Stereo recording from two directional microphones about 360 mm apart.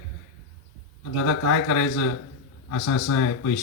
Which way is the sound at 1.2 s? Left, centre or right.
Left.